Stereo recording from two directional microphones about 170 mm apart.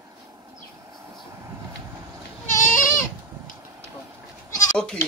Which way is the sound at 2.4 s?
50° left (ahead or behind).